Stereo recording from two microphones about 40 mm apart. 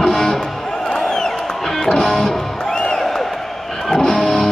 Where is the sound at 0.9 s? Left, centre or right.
Centre.